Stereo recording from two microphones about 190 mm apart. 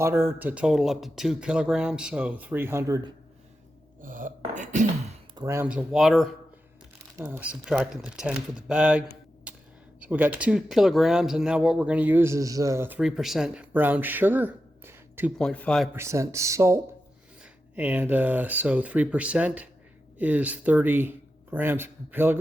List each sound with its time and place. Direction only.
0.0 s speech: 10° right (ahead or behind)
4.0 s throat clearing: 45° right (ahead or behind)
5.3 s speech: 20° right (ahead or behind)
15.4 s speech: 5° left (ahead or behind)
16.0 s speech: 15° right (ahead or behind)